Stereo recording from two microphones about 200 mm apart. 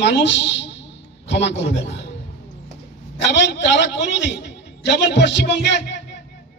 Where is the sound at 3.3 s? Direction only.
60° left (ahead or behind).